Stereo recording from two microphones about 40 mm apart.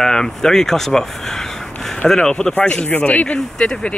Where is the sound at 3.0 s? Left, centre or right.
Left.